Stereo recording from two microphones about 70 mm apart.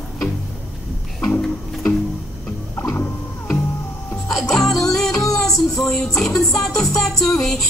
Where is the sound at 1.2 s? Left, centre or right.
Left.